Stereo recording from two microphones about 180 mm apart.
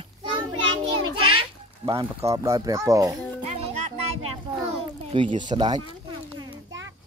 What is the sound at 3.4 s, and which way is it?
Music, 35° right (ahead or behind).